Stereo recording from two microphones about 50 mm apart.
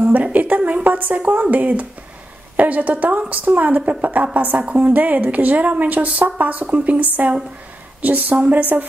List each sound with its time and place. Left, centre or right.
0.0 s music: right
0.8 s a woman's voice: right